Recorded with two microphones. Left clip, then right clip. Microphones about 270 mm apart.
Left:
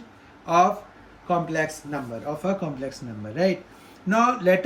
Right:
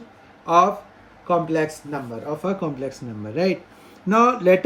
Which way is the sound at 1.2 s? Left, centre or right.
Centre.